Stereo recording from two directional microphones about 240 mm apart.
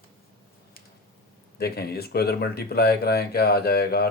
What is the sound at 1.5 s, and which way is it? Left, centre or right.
Speech, left.